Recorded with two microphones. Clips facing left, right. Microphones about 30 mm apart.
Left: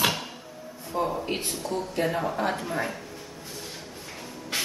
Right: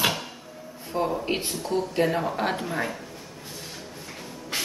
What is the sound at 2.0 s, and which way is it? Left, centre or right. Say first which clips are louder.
Speech: right 1 dB; centre.